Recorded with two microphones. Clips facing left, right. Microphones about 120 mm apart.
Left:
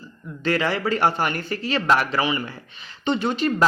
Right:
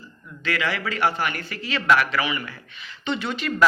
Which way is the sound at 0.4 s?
35° left (ahead or behind).